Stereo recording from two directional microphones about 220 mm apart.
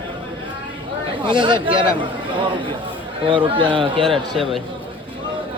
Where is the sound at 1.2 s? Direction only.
20° right (ahead or behind).